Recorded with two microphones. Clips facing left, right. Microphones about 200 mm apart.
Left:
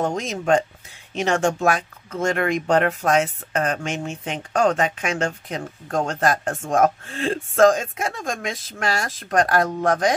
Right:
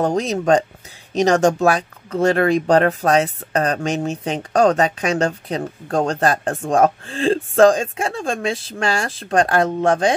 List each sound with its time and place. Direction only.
0.0 s speech: 35° right (ahead or behind)